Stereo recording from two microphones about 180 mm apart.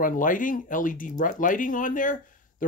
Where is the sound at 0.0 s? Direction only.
50° left (ahead or behind).